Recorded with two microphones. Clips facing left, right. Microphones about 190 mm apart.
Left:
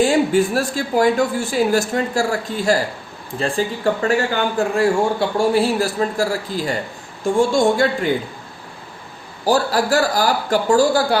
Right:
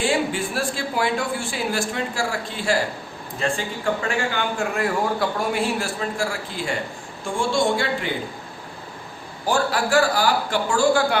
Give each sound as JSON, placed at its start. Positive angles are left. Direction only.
{"t": 0.0, "sound": "a woman's voice", "side_deg": 40}
{"t": 9.5, "sound": "a woman's voice", "side_deg": 40}